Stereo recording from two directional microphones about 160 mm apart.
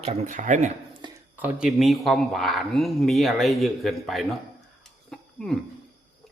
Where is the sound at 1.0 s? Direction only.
30° right (ahead or behind).